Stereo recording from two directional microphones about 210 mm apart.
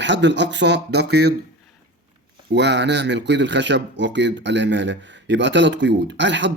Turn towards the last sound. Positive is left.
turn(degrees=-60)  # may be behind; listen again after turning